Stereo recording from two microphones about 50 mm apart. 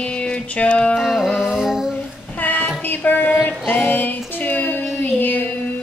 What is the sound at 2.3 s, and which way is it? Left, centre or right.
Child singing, left.